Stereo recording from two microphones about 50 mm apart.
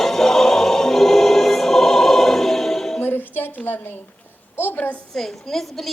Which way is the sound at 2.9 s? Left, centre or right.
Left.